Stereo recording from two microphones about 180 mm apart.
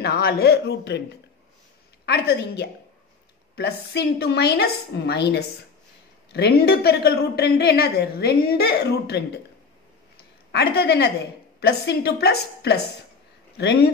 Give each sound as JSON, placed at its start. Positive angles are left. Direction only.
{"t": 0.0, "sound": "a woman's voice", "side_deg": 60}
{"t": 2.0, "sound": "a woman's voice", "side_deg": 65}
{"t": 10.1, "sound": "a sound", "side_deg": 60}
{"t": 11.6, "sound": "a woman's voice", "side_deg": 65}